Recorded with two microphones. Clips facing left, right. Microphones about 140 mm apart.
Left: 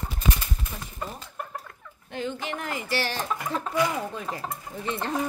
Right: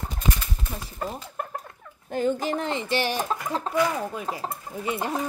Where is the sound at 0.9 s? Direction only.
55° right (ahead or behind).